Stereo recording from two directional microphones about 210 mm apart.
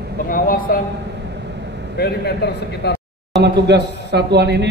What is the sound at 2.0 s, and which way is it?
A man's voice, 50° left (ahead or behind).